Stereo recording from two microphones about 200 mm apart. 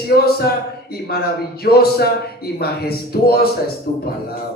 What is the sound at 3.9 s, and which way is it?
Speech, 40° left (ahead or behind).